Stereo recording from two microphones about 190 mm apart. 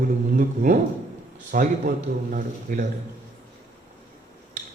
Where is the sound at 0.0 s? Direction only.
45° right (ahead or behind).